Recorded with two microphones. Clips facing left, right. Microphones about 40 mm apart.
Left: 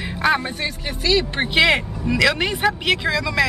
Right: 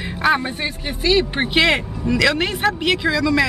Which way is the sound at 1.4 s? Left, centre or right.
Centre.